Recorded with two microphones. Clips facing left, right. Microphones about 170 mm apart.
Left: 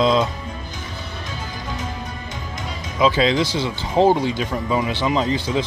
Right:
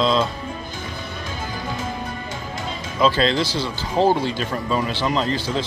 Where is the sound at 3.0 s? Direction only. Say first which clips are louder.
Left 1 dB; 15° left (ahead or behind).